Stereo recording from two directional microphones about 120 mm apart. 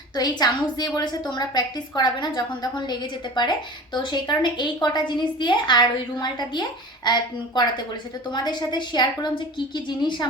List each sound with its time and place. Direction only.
0.2 s a woman's voice: 35° left (ahead or behind)